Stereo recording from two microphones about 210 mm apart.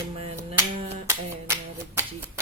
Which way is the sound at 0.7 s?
30° right (ahead or behind).